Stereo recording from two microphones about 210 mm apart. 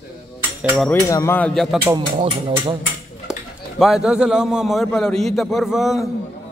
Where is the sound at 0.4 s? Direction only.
10° right (ahead or behind).